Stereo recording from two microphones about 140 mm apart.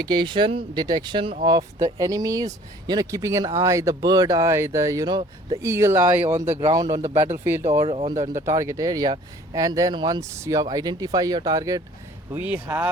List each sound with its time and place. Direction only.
0.0 s speech: 30° right (ahead or behind)
1.5 s speech: 25° right (ahead or behind)
7.9 s speech: 40° right (ahead or behind)
8.1 s speech: 60° right (ahead or behind)
8.4 s speech: 20° right (ahead or behind)
12.3 s speech: 10° right (ahead or behind)